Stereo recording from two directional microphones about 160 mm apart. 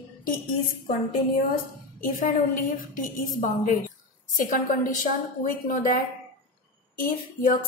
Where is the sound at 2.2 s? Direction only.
60° left (ahead or behind).